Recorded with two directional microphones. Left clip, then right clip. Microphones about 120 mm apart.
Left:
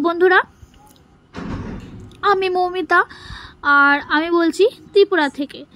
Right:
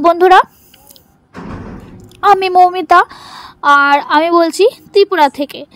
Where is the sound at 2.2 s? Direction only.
45° right (ahead or behind).